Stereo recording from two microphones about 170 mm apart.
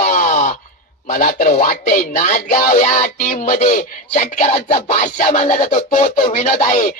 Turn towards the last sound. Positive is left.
turn(degrees=50)  # may be behind; listen again after turning